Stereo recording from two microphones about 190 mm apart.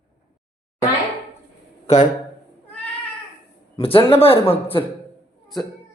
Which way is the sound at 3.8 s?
30° left (ahead or behind).